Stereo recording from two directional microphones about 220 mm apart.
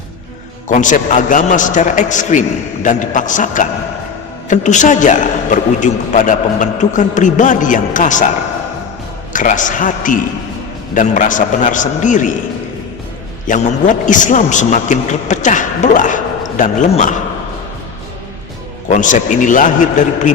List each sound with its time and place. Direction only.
0.7 s a man's voice: 35° left (ahead or behind)
9.3 s a man's voice: 35° left (ahead or behind)
13.5 s a man's voice: 35° left (ahead or behind)
18.9 s a man's voice: 35° left (ahead or behind)